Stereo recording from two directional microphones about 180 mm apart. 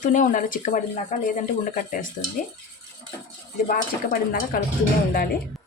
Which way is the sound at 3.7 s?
50° left (ahead or behind).